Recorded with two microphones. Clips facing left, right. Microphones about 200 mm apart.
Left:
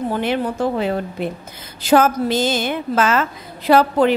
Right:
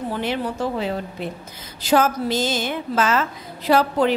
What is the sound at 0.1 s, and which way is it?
A woman's voice, 55° left (ahead or behind).